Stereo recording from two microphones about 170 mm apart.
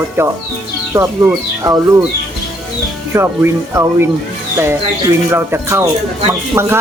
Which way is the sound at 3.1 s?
15° right (ahead or behind).